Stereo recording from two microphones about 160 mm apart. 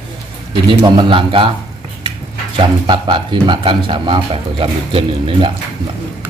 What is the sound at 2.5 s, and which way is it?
Speech, 30° right (ahead or behind).